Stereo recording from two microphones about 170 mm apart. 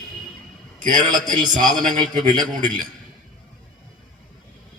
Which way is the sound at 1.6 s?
50° right (ahead or behind).